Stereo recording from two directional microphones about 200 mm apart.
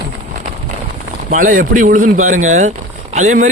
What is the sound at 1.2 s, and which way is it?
A man's voice, 40° right (ahead or behind).